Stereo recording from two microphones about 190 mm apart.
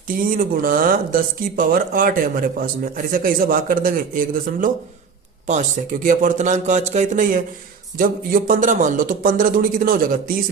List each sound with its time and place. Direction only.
0.2 s a man's voice: 50° right (ahead or behind)